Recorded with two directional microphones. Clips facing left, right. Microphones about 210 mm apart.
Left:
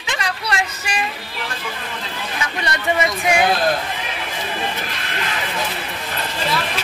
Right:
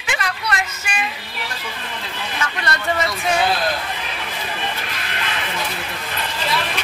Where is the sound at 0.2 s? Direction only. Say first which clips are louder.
Left 4 dB; 30° left (ahead or behind).